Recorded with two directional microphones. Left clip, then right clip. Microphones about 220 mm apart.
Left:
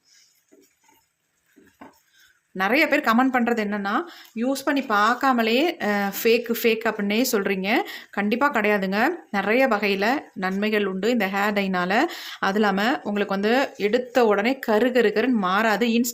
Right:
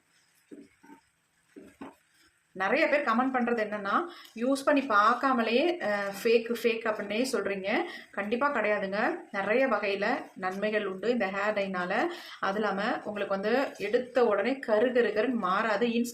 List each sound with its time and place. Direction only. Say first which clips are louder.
2.6 s speech: left 6 dB; 50° left (ahead or behind)